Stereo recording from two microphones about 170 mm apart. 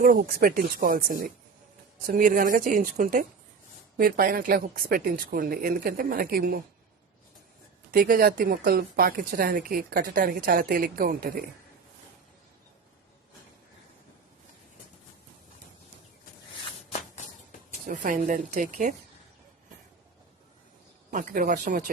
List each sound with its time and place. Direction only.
0.0 s speech: 55° right (ahead or behind)
7.9 s speech: 60° right (ahead or behind)
17.8 s speech: 50° right (ahead or behind)
21.1 s speech: 50° right (ahead or behind)